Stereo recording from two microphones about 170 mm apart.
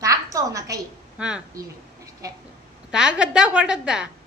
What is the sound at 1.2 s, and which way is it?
Speech, 5° right (ahead or behind).